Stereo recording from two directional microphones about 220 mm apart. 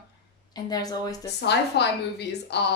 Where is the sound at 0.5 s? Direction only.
20° left (ahead or behind).